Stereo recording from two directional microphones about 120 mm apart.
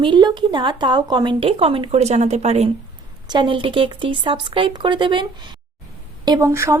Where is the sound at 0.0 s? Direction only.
40° right (ahead or behind); by 2.6 s 65° right (ahead or behind).